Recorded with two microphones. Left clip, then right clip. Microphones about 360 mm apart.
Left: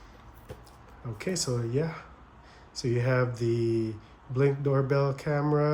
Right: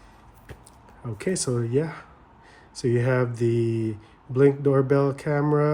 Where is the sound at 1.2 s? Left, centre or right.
Right.